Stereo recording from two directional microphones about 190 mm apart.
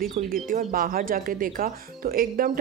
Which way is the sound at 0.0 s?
45° right (ahead or behind).